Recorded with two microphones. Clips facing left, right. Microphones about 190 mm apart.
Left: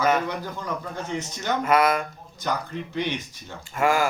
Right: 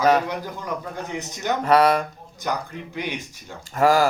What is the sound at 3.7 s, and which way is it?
Speech, 40° right (ahead or behind).